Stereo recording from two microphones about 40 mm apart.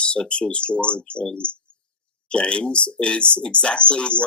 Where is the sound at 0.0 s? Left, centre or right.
Left.